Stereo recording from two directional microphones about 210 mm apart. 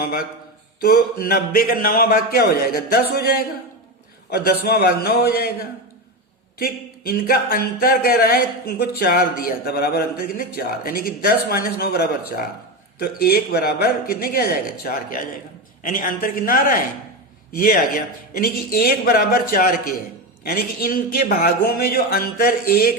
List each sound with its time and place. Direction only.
0.0 s a man's voice: 45° left (ahead or behind)